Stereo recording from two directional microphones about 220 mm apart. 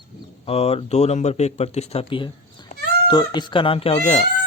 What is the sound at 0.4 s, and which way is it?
Speech, 25° left (ahead or behind).